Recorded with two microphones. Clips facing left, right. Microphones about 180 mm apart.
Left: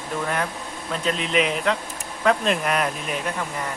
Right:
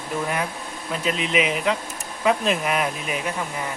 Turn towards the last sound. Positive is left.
turn(degrees=-5)  # may be behind; listen again after turning